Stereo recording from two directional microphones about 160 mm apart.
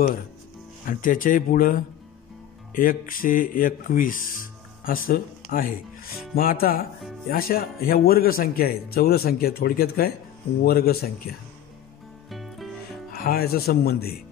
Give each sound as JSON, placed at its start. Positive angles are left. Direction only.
{"t": 0.8, "sound": "speech", "side_deg": 55}
{"t": 12.3, "sound": "music", "side_deg": 0}
{"t": 13.1, "sound": "speech", "side_deg": 70}